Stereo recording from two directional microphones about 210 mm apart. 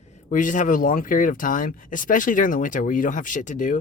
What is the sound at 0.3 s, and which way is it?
Speech, 40° left (ahead or behind).